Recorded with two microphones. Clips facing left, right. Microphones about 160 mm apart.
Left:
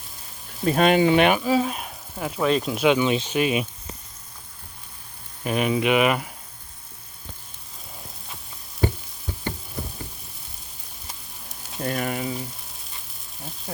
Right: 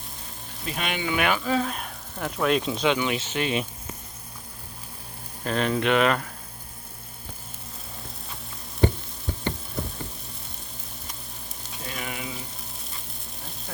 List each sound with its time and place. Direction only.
0.6 s speech: 40° left (ahead or behind)
1.3 s speech: 20° left (ahead or behind)
1.5 s speech: 5° left (ahead or behind)
2.8 s speech: 15° left (ahead or behind)
5.4 s speech: 10° left (ahead or behind)
11.8 s frying: 50° left (ahead or behind)